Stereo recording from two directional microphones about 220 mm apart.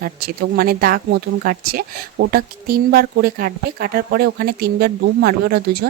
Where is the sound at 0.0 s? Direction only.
45° right (ahead or behind).